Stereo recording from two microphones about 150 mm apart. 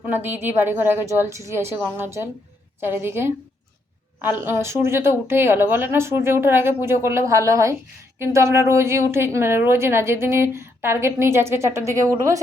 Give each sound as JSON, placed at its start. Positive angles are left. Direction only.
{"t": 0.0, "sound": "a woman's voice", "side_deg": -15}